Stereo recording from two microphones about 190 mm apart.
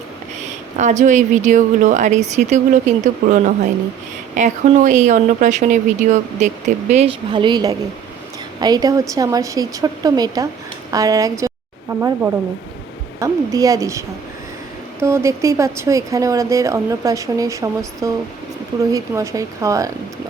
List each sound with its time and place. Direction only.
0.8 s a woman's voice: 40° right (ahead or behind); by 14.0 s 15° right (ahead or behind)
15.0 s a woman's voice: 15° right (ahead or behind)